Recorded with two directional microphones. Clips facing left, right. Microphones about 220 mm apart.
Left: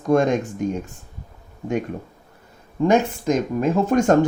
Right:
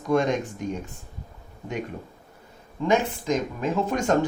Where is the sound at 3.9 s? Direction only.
50° left (ahead or behind).